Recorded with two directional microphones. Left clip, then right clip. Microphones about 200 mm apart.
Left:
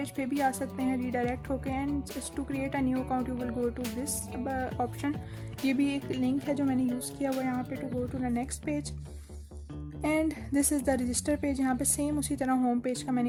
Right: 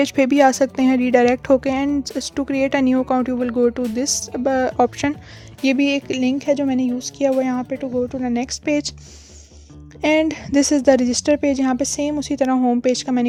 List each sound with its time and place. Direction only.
0.0 s speech: 50° right (ahead or behind)
10.0 s speech: 40° right (ahead or behind)